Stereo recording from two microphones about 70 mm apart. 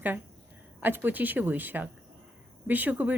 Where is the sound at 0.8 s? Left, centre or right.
Right.